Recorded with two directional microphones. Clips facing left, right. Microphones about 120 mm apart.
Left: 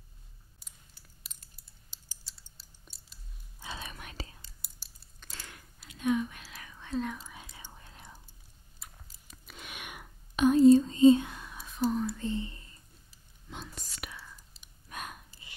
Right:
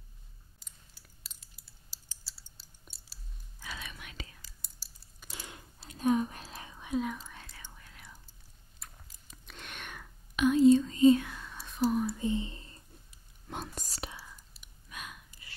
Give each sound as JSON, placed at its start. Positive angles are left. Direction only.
{"t": 1.3, "sound": "typing", "side_deg": 0}
{"t": 2.3, "sound": "a sound", "side_deg": -5}
{"t": 3.5, "sound": "whispering", "side_deg": 30}
{"t": 3.9, "sound": "whispering", "side_deg": 40}
{"t": 5.2, "sound": "a sound", "side_deg": -15}
{"t": 5.9, "sound": "whispering", "side_deg": -35}
{"t": 6.8, "sound": "whispering", "side_deg": -10}
{"t": 7.7, "sound": "whispering", "side_deg": 30}
{"t": 9.5, "sound": "a sound", "side_deg": 5}
{"t": 10.3, "sound": "whispering", "side_deg": 35}
{"t": 11.6, "sound": "whispering", "side_deg": -5}
{"t": 13.5, "sound": "whispering", "side_deg": -45}
{"t": 14.9, "sound": "gasp", "side_deg": 45}